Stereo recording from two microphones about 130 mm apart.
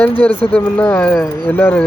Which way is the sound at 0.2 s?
10° left (ahead or behind).